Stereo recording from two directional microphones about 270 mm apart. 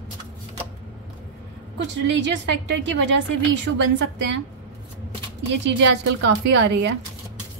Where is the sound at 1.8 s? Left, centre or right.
Right.